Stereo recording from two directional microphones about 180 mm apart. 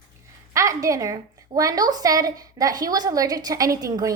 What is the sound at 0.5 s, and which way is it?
A woman's voice, 15° right (ahead or behind).